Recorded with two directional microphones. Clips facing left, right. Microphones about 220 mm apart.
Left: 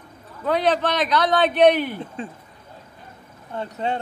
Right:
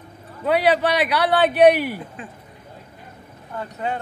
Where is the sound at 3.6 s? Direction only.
25° left (ahead or behind).